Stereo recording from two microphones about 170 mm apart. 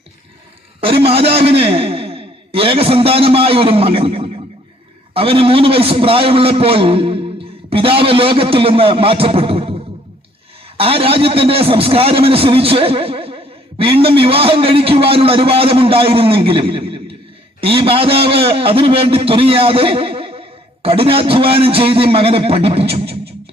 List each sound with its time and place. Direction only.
0.8 s a man's voice: 35° right (ahead or behind)